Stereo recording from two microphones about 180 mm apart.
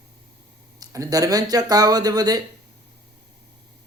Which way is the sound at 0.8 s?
20° right (ahead or behind).